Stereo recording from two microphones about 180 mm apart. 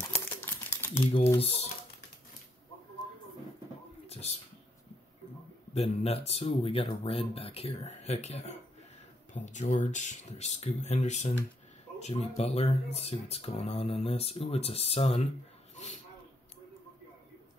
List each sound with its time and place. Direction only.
0.0 s crumpling: 10° left (ahead or behind)
1.4 s speech: 35° left (ahead or behind)
4.1 s a sound: 35° left (ahead or behind)
5.8 s speech: 35° left (ahead or behind)